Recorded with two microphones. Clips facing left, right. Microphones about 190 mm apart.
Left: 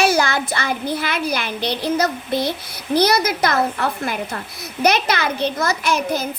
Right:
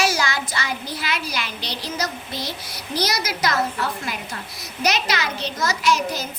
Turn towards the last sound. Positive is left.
turn(degrees=55)  # may be behind; listen again after turning